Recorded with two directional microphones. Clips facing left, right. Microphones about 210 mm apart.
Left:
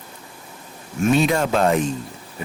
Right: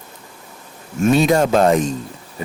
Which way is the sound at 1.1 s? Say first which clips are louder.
Right 4 dB; 40° right (ahead or behind).